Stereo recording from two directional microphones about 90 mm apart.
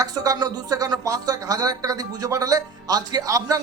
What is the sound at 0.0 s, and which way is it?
Speech, 45° right (ahead or behind).